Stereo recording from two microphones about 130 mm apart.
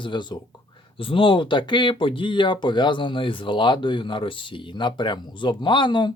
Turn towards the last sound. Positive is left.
turn(degrees=35)  # may be behind; listen again after turning